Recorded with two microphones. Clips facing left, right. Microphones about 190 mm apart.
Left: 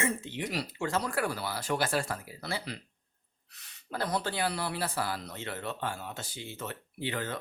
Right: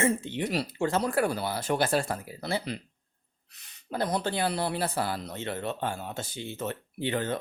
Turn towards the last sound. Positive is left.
turn(degrees=-25)  # may be behind; listen again after turning